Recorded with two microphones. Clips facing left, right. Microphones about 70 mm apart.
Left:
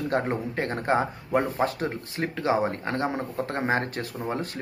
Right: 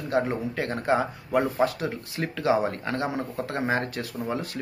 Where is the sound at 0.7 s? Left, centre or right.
Left.